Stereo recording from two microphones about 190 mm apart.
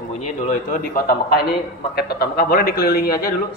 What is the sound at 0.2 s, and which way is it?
A man's voice, 45° left (ahead or behind).